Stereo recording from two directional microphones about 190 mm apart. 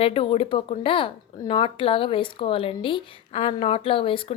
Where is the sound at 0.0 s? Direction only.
30° left (ahead or behind).